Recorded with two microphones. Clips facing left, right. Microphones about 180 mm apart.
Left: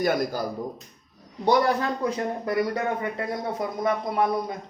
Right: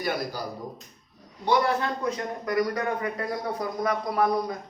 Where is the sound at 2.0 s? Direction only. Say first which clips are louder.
Left 2 dB; 30° left (ahead or behind).